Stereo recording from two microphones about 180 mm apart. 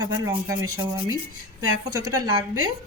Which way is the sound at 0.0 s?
20° right (ahead or behind).